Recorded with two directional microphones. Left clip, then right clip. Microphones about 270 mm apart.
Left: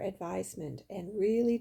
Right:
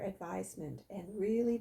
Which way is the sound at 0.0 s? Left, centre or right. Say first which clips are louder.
Left 5 dB; left.